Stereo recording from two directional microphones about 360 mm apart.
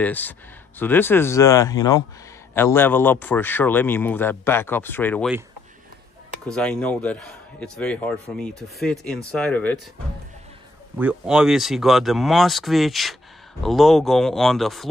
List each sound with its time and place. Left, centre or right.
0.0 s a man's voice: centre
6.5 s a man's voice: centre
11.0 s a man's voice: centre